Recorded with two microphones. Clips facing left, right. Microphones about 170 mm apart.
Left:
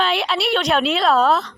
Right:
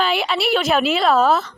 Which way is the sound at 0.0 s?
Centre (ahead or behind).